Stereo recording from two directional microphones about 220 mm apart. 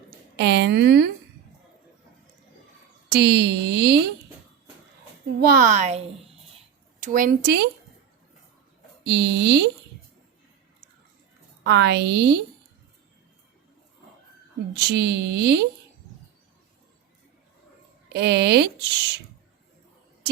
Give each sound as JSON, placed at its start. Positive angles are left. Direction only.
{"t": 0.3, "sound": "speech", "side_deg": -50}
{"t": 3.2, "sound": "speech", "side_deg": -50}
{"t": 5.4, "sound": "a woman's voice", "side_deg": -40}
{"t": 9.0, "sound": "speech", "side_deg": -50}
{"t": 11.6, "sound": "speech", "side_deg": -50}
{"t": 14.7, "sound": "speech", "side_deg": -50}
{"t": 18.1, "sound": "speech", "side_deg": -50}